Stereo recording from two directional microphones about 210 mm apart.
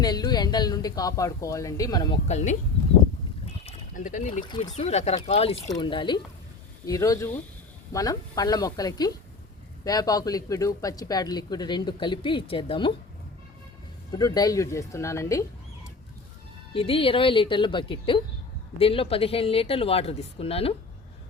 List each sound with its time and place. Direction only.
0.0 s speech: 20° left (ahead or behind)
2.2 s speech: 35° left (ahead or behind)
3.6 s a sound: 35° left (ahead or behind)
4.4 s speech: 20° left (ahead or behind)
4.7 s speech: 30° left (ahead or behind)
14.1 s speech: 20° left (ahead or behind)
16.7 s speech: 25° left (ahead or behind)